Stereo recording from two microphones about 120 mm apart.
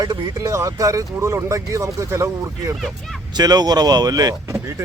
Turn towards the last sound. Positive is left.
turn(degrees=-25)  # may be behind; listen again after turning